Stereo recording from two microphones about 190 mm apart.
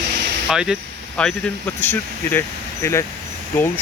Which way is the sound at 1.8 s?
10° left (ahead or behind).